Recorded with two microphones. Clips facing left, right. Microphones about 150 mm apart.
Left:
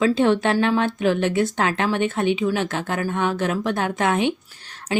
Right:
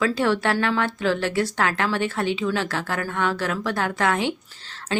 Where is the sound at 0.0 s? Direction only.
20° left (ahead or behind).